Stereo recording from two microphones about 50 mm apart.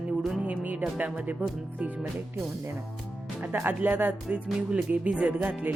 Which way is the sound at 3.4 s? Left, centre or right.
Right.